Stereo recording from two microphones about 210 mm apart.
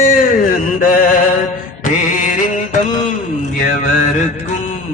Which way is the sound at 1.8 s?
40° left (ahead or behind).